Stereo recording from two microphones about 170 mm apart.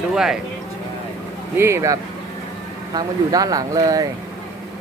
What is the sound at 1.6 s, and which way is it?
Speech, 15° right (ahead or behind).